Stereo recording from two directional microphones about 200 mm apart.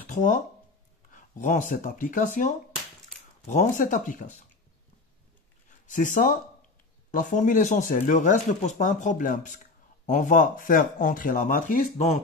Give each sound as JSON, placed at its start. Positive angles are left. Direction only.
{"t": 0.0, "sound": "a sound", "side_deg": 40}
{"t": 1.1, "sound": "speech", "side_deg": 40}
{"t": 5.9, "sound": "speech", "side_deg": 40}